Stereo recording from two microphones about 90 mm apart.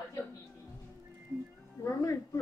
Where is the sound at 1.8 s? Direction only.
35° left (ahead or behind).